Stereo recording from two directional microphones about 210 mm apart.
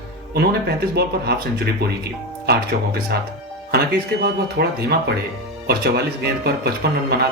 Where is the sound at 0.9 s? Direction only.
50° right (ahead or behind).